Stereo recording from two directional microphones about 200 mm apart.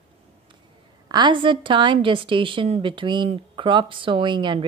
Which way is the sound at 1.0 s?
20° right (ahead or behind).